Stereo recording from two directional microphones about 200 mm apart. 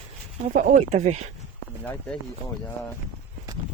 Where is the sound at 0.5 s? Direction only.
40° right (ahead or behind).